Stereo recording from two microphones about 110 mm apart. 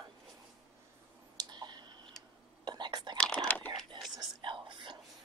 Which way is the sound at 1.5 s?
40° right (ahead or behind).